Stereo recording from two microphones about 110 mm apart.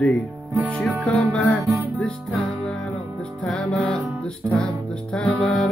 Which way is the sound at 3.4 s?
10° left (ahead or behind).